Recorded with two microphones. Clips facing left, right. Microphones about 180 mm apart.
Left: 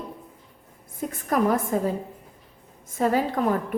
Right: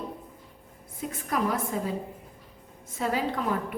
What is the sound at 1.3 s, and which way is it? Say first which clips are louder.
Speech: left 6 dB; 45° left (ahead or behind).